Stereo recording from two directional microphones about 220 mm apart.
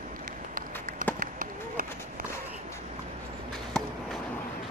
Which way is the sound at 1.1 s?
40° right (ahead or behind).